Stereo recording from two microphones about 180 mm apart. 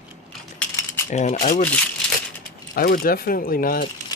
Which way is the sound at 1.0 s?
40° left (ahead or behind).